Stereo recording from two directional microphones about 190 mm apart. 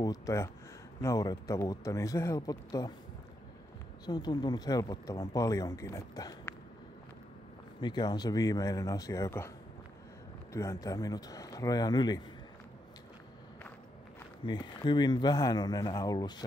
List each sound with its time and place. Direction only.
0.0 s speech: 15° left (ahead or behind)
4.0 s speech: 20° left (ahead or behind)
7.8 s speech: 20° left (ahead or behind)
10.5 s speech: 15° left (ahead or behind)
14.4 s speech: 20° left (ahead or behind)